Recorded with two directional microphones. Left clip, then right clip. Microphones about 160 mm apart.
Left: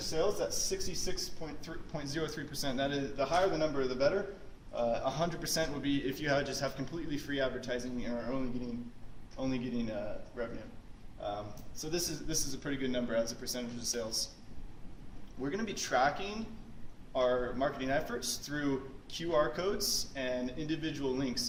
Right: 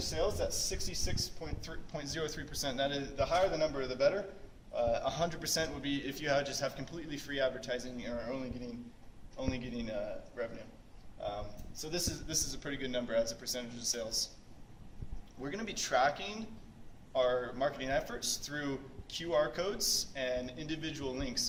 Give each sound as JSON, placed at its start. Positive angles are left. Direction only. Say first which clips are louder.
{"t": 0.0, "sound": "a man's voice", "louder": "left 2 dB", "side_deg": 0}
{"t": 11.8, "sound": "a man's voice", "louder": "left 1 dB", "side_deg": 0}
{"t": 15.4, "sound": "a man's voice", "louder": "left 2 dB", "side_deg": 5}